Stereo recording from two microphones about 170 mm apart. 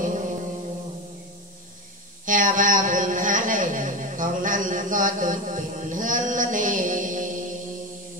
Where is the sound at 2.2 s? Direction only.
50° right (ahead or behind).